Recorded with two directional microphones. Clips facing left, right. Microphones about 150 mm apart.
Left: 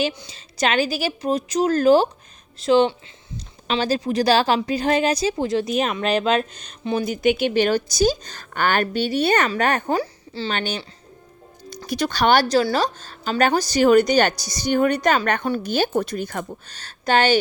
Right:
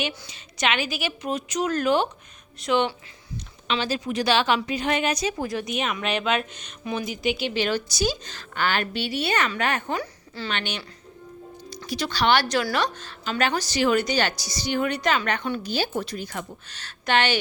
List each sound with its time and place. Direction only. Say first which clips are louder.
0.3 s speech: left 4 dB; 35° left (ahead or behind)
3.7 s speech: left 5 dB; 40° left (ahead or behind)
7.1 s a woman's voice: left 8 dB; 50° left (ahead or behind)
11.9 s a woman's voice: left 4 dB; 50° left (ahead or behind)
12.5 s a woman's voice: left 5 dB; 30° left (ahead or behind); by 16.5 s 50° left (ahead or behind)
16.6 s speech: left 4 dB; 40° left (ahead or behind)